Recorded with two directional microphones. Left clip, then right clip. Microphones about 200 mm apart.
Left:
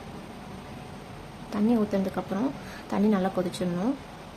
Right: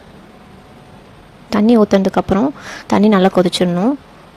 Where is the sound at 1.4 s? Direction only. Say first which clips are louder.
Right 15 dB; 50° right (ahead or behind).